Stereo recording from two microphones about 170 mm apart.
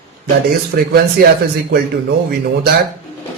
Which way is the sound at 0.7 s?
65° right (ahead or behind).